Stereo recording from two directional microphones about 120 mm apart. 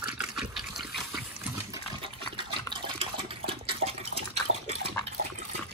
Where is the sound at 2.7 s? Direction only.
45° right (ahead or behind).